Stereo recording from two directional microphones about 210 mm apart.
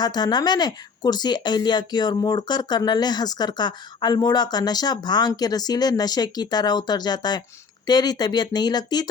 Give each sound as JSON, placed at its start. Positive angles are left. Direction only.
{"t": 0.0, "sound": "speech", "side_deg": 20}